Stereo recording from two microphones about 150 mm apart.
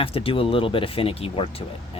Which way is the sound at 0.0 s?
40° left (ahead or behind).